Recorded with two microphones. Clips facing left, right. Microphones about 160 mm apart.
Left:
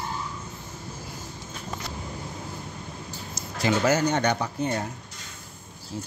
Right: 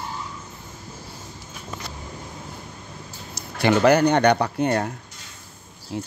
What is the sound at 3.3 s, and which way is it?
Speech, 65° right (ahead or behind).